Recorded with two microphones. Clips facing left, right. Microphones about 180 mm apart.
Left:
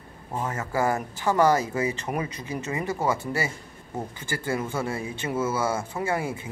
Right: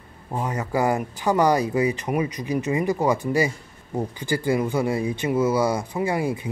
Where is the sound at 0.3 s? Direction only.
15° right (ahead or behind).